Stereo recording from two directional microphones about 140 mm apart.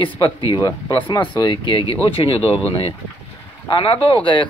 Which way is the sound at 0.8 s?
35° left (ahead or behind).